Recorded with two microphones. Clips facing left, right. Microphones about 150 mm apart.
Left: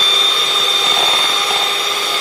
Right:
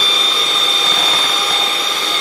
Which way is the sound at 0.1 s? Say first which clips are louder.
Even; centre (ahead or behind).